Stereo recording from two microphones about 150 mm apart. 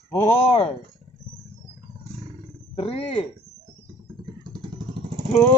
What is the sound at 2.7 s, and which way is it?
Speech, 40° left (ahead or behind).